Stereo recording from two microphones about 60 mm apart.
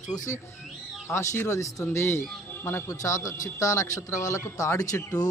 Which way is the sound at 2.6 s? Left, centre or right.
Left.